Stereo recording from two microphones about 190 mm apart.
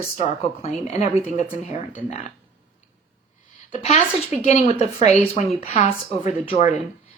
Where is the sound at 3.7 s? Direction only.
35° left (ahead or behind).